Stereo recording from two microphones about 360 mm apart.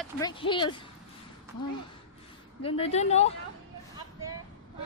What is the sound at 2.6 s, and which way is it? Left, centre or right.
Speech, centre.